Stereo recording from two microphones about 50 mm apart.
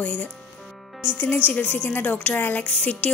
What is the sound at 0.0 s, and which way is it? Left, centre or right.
Speech, left.